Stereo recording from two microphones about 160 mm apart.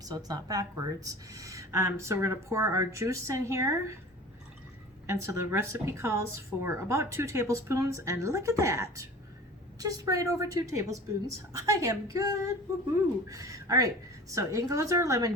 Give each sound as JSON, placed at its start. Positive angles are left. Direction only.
{"t": 0.0, "sound": "a woman's voice", "side_deg": -25}
{"t": 5.0, "sound": "a woman's voice", "side_deg": -15}